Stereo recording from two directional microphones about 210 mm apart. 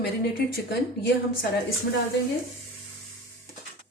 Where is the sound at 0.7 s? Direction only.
50° left (ahead or behind).